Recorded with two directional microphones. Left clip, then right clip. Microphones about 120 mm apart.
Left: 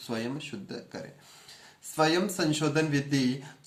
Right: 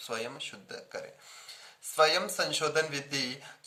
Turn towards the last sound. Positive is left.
turn(degrees=-35)  # may be behind; listen again after turning